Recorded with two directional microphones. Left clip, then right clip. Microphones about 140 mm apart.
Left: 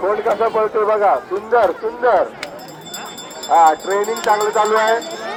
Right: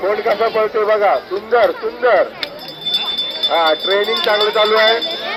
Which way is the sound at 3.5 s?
5° right (ahead or behind).